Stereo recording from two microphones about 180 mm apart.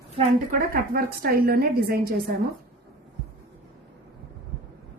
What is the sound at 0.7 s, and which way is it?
A woman's voice, 55° right (ahead or behind).